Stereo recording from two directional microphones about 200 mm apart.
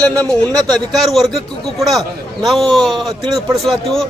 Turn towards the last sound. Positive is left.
turn(degrees=0)  # may be behind; listen again after turning